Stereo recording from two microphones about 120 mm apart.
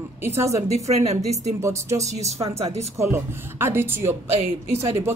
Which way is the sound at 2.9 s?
25° right (ahead or behind).